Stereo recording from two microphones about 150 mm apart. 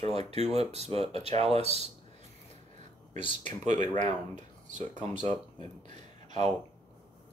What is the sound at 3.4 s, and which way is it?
Speech, 50° right (ahead or behind).